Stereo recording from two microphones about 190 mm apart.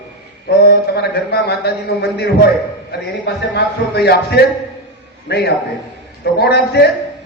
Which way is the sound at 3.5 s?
60° left (ahead or behind).